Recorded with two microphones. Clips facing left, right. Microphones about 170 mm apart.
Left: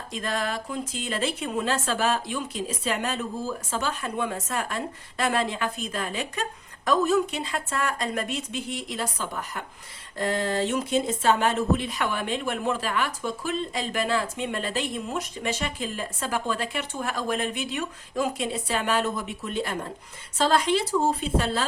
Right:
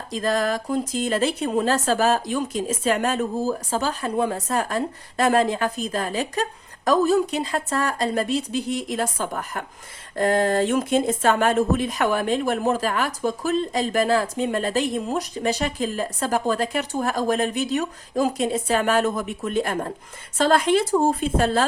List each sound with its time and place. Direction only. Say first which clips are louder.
0.1 s speech: right 7 dB; 40° right (ahead or behind)